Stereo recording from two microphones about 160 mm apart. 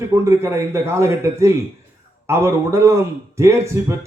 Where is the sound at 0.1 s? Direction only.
15° right (ahead or behind).